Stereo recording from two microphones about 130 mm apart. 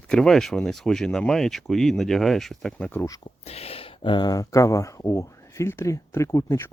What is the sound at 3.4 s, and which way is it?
Speech, 50° left (ahead or behind).